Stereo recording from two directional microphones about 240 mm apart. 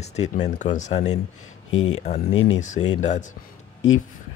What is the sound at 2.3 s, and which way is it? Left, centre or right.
Speech, left.